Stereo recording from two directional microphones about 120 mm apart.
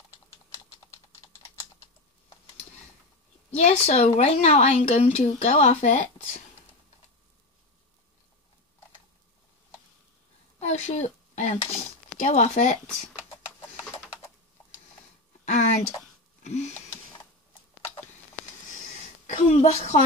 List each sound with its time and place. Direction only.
3.5 s speech: 65° left (ahead or behind); by 6.0 s 85° left
10.6 s speech: 70° left (ahead or behind)
15.4 s a sound: 75° left (ahead or behind)
19.2 s a woman's voice: 80° left; by 20.0 s 60° left (ahead or behind)